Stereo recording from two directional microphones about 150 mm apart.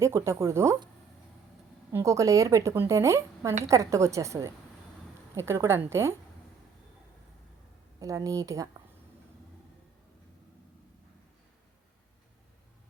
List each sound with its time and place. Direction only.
0.0 s a woman's voice: 20° right (ahead or behind)
1.9 s a woman's voice: 20° right (ahead or behind)
7.9 s a woman's voice: 20° right (ahead or behind)